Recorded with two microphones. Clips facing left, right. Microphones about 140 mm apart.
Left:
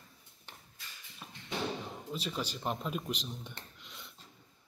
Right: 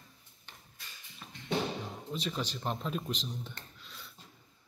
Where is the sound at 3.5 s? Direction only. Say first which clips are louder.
Even; 20° left (ahead or behind).